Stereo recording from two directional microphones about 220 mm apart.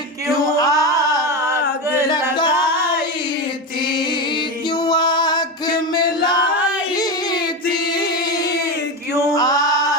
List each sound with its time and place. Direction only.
0.5 s singing: 15° left (ahead or behind)
2.3 s singing: 20° left (ahead or behind)
2.7 s singing: 10° right (ahead or behind)
4.9 s music: 20° left (ahead or behind)
9.3 s male singing: 15° left (ahead or behind)